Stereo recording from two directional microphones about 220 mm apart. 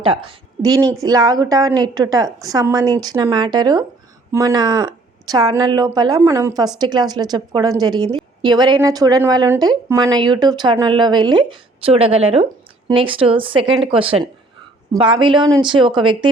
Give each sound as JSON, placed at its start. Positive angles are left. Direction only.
{"t": 0.0, "sound": "a woman's voice", "side_deg": -25}